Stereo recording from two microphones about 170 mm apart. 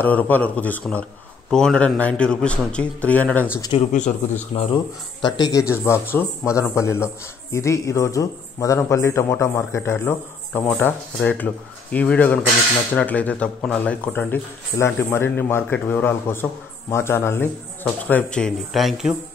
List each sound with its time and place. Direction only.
0.0 s a man's voice: 10° left (ahead or behind)
3.7 s speech: 45° left (ahead or behind)
4.5 s speech: 35° left (ahead or behind)
5.2 s a man's voice: 20° left (ahead or behind); by 19.1 s centre (ahead or behind)